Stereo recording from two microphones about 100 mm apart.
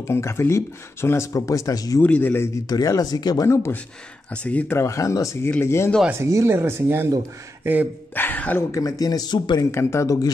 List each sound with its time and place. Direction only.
0.0 s speech: 30° left (ahead or behind)
2.0 s speech: 15° left (ahead or behind)
2.7 s speech: 40° left (ahead or behind)
3.4 s speech: 30° left (ahead or behind)
4.3 s speech: 15° left (ahead or behind)
4.7 s speech: 30° left (ahead or behind)
6.2 s speech: 30° right (ahead or behind)
8.1 s speech: 20° left (ahead or behind)
8.7 s speech: 35° left (ahead or behind)
9.7 s speech: 25° left (ahead or behind)